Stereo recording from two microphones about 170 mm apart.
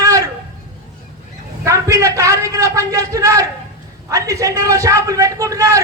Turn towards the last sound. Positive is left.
turn(degrees=-20)  # may be behind; listen again after turning